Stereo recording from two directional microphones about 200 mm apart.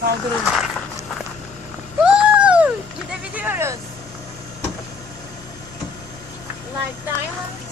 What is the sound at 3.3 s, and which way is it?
Speech, 10° right (ahead or behind).